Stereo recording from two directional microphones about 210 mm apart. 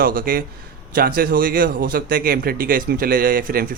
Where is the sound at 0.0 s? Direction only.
40° right (ahead or behind).